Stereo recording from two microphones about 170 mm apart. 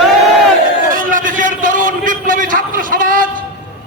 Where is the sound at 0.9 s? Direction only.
55° right (ahead or behind).